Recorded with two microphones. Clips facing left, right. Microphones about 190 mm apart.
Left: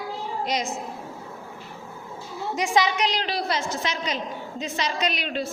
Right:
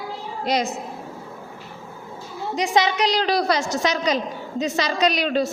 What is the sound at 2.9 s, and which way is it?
A woman's voice, 35° right (ahead or behind).